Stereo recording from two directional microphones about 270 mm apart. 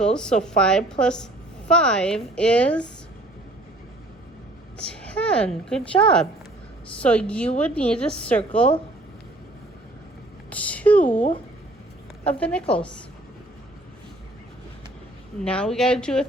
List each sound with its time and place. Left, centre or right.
0.0 s a woman's voice: centre
4.8 s a woman's voice: centre
10.5 s a sound: centre
11.1 s speech: left
12.2 s a woman's voice: centre
15.4 s a woman's voice: centre